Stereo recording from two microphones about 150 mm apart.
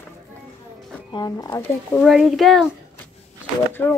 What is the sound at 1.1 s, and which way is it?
Speech, 25° left (ahead or behind).